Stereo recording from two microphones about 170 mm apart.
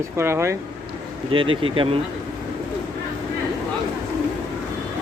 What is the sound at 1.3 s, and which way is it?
Speech, 30° right (ahead or behind).